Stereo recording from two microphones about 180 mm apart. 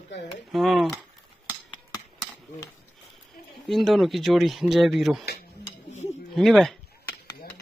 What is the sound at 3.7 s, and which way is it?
Speech, centre (ahead or behind).